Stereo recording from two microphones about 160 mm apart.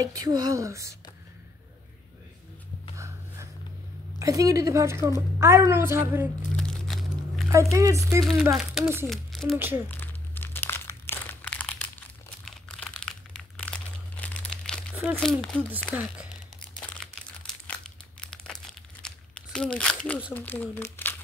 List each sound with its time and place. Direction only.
0.0 s a woman's voice: 20° right (ahead or behind)
4.2 s a woman's voice: 20° right (ahead or behind)
6.5 s crunch: 5° left (ahead or behind)
7.7 s a woman's voice: 20° right (ahead or behind)
8.5 s speech: centre (ahead or behind)
9.6 s a woman's voice: 15° right (ahead or behind)
9.8 s crumpling: 15° left (ahead or behind)
15.1 s speech: 5° left (ahead or behind)
15.9 s a woman's voice: 10° right (ahead or behind)
16.8 s crumpling: 5° left (ahead or behind)
20.3 s speech: 10° left (ahead or behind)